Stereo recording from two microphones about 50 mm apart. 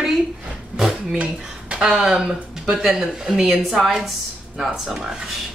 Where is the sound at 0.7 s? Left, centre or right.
Centre.